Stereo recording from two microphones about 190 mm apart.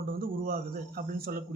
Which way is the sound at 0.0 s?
50° right (ahead or behind).